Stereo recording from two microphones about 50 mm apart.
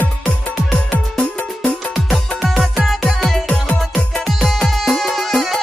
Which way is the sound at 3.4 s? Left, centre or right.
Centre.